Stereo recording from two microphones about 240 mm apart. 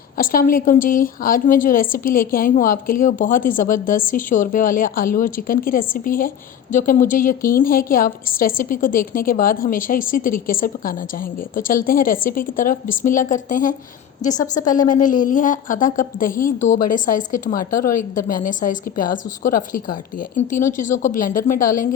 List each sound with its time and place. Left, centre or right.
0.2 s a woman's voice: left